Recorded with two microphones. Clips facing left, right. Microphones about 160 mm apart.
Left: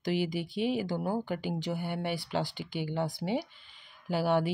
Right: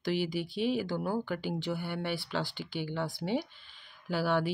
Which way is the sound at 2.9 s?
15° left (ahead or behind).